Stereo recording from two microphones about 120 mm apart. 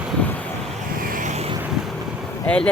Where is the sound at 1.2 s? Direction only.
80° right.